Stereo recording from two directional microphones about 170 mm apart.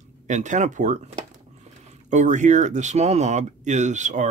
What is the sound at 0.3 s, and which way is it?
Speech, 45° right (ahead or behind).